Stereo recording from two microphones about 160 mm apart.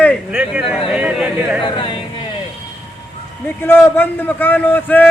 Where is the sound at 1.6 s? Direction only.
30° left (ahead or behind).